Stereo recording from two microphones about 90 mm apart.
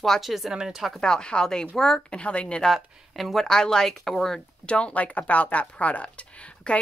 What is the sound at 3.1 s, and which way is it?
Speech, centre (ahead or behind).